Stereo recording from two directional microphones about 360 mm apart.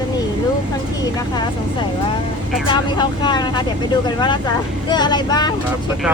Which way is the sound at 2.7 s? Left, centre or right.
Centre.